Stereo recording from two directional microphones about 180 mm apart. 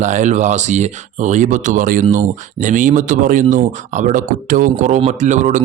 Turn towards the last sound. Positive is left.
turn(degrees=-45)  # may be behind; listen again after turning